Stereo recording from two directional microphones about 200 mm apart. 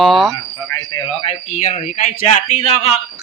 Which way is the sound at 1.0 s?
30° left (ahead or behind).